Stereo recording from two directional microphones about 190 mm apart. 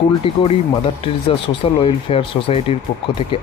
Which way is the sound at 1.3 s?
30° left (ahead or behind).